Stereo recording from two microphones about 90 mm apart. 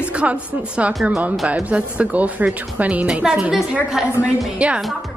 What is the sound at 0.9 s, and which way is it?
Speech, centre (ahead or behind).